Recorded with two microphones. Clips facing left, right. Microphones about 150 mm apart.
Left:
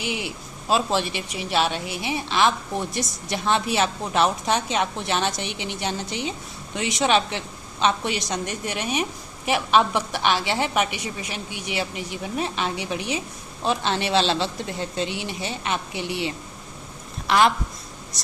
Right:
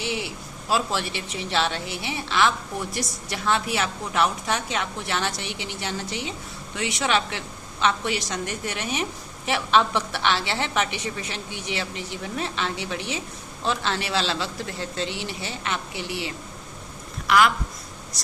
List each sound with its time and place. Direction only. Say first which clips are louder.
0.0 s a man's voice: even; 15° left (ahead or behind)